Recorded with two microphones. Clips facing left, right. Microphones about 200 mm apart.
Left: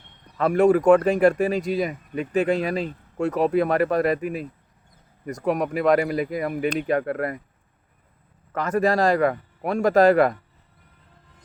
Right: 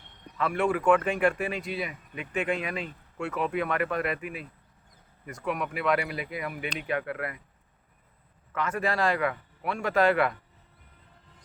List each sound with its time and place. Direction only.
0.3 s speech: 40° left (ahead or behind)
8.5 s speech: 40° left (ahead or behind)